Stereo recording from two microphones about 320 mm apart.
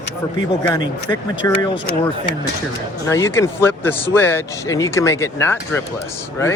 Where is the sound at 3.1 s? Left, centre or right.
Centre.